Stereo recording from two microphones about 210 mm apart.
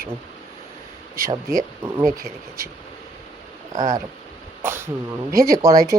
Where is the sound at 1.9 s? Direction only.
15° right (ahead or behind).